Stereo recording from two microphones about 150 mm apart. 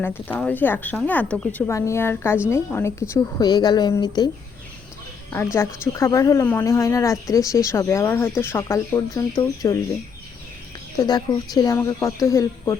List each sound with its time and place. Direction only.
0.0 s a woman's voice: 15° left (ahead or behind)
5.5 s a woman's voice: 20° left (ahead or behind)
10.9 s a woman's voice: 25° left (ahead or behind)